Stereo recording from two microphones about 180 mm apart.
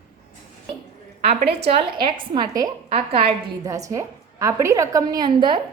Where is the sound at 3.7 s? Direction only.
20° right (ahead or behind).